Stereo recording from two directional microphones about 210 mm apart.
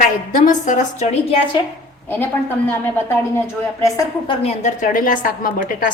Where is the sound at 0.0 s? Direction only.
35° left (ahead or behind).